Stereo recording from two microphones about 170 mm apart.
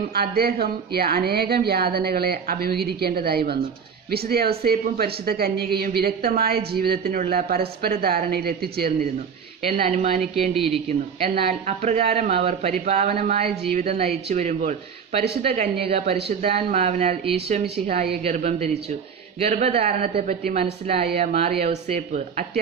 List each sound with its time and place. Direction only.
0.1 s a woman's voice: 65° right (ahead or behind)
9.7 s a woman's voice: 45° right (ahead or behind)